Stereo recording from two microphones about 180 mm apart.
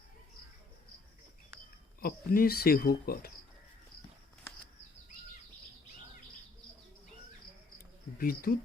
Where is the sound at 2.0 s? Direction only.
55° left (ahead or behind).